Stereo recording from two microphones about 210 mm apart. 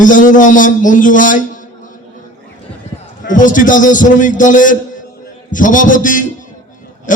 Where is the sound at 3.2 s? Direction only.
40° left (ahead or behind).